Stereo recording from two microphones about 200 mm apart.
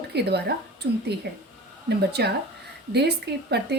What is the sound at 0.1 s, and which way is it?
A woman's voice, 55° right (ahead or behind).